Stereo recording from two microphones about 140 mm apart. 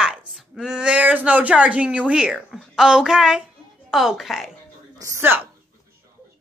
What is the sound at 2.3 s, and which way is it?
A woman's voice, 5° right (ahead or behind).